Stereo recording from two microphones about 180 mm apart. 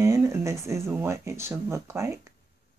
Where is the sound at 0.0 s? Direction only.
15° right (ahead or behind).